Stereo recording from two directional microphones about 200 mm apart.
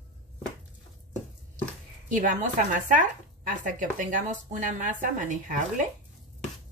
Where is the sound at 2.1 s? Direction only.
40° right (ahead or behind).